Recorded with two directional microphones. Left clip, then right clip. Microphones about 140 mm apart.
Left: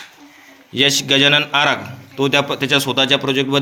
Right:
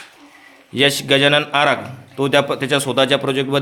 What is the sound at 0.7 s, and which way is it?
A man's voice, 35° right (ahead or behind).